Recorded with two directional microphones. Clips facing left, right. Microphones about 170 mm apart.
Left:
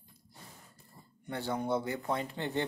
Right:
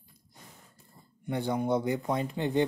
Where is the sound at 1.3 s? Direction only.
15° right (ahead or behind).